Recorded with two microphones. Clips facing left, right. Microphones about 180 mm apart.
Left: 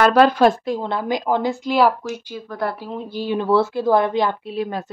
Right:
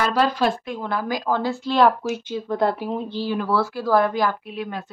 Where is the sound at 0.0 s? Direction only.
60° left (ahead or behind).